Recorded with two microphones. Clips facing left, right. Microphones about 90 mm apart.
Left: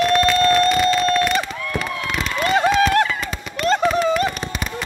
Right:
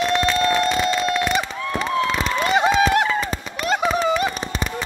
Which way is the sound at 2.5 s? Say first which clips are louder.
Left 1 dB; 15° right (ahead or behind).